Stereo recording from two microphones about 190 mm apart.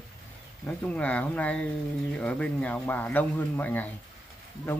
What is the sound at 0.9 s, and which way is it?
Speech, 5° left (ahead or behind).